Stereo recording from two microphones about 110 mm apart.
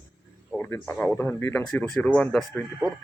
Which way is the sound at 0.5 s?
20° left (ahead or behind).